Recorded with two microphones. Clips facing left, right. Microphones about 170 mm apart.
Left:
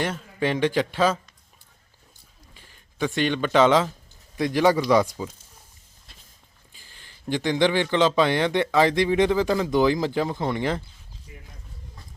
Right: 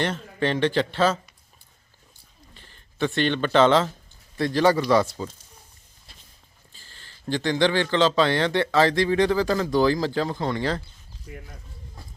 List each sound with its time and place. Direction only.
0.0 s speech: 10° left (ahead or behind)
2.6 s speech: 10° left (ahead or behind)
6.7 s speech: 15° left (ahead or behind)